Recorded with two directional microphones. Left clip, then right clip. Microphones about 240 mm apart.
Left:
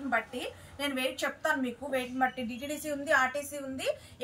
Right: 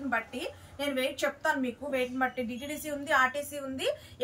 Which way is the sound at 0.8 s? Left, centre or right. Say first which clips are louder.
Right 2 dB; centre.